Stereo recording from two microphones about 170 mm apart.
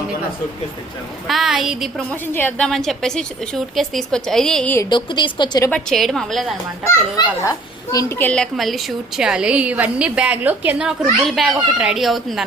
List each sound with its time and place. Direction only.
1.3 s a woman's voice: centre (ahead or behind)
4.8 s a woman's voice: 30° left (ahead or behind)
5.7 s a woman's voice: centre (ahead or behind)
7.4 s a woman's voice: 20° left (ahead or behind); by 12.5 s centre (ahead or behind)